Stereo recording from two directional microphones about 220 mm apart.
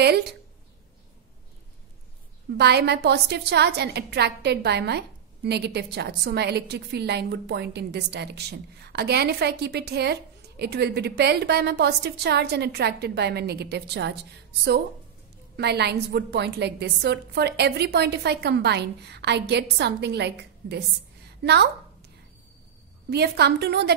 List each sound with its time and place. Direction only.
2.5 s a woman's voice: 50° right (ahead or behind)
15.5 s a woman's voice: 50° right (ahead or behind)
23.0 s a woman's voice: 50° right (ahead or behind)